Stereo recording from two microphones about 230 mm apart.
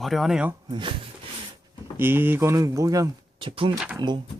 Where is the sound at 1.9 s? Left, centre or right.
Centre.